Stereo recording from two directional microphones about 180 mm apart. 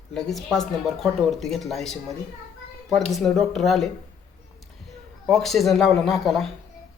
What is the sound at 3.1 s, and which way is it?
Speech, centre (ahead or behind).